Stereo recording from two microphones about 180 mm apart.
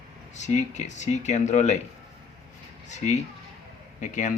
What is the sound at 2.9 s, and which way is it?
A man's voice, 40° left (ahead or behind).